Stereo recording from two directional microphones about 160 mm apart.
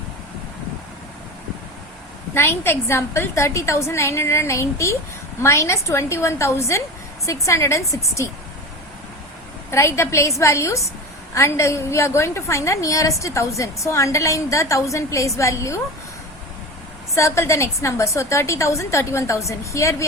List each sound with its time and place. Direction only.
2.3 s a woman's voice: 15° left (ahead or behind)
9.7 s a woman's voice: 20° left (ahead or behind)
17.2 s a woman's voice: 20° left (ahead or behind)